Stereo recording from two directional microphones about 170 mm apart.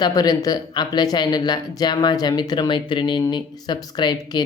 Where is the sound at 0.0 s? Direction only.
20° left (ahead or behind).